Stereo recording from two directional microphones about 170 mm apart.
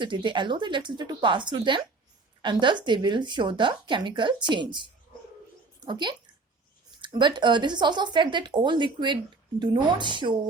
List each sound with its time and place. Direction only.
0.0 s speech: 30° right (ahead or behind)